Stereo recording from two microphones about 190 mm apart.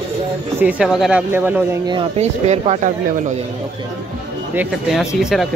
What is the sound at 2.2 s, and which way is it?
Speech, 35° right (ahead or behind).